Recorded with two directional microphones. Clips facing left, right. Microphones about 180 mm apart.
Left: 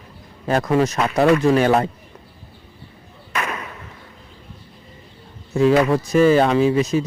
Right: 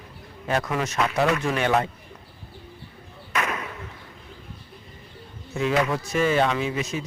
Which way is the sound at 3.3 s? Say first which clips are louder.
Left 1 dB; 35° left (ahead or behind).